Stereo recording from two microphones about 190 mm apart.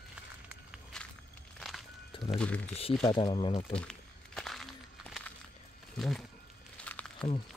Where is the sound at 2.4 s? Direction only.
5° left (ahead or behind).